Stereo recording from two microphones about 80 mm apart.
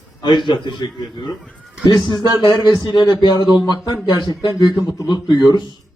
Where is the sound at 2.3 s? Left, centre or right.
Left.